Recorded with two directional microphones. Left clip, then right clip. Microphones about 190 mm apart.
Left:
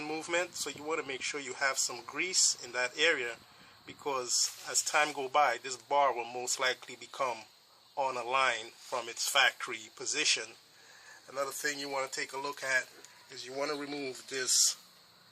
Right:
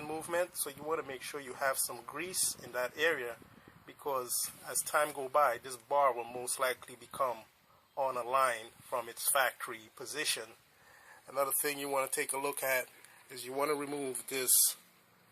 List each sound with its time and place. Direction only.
0.0 s speech: 5° right (ahead or behind)
11.3 s speech: 30° right (ahead or behind)
13.7 s speech: 35° right (ahead or behind)